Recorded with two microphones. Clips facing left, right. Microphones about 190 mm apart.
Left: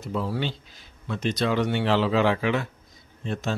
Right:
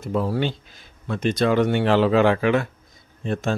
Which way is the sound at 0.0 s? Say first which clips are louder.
Right 5 dB; 50° right (ahead or behind).